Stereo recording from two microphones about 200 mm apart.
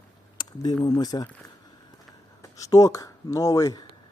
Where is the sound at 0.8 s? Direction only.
20° left (ahead or behind).